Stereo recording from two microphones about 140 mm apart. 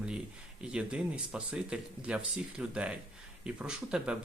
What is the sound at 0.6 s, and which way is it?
Speech, 10° right (ahead or behind).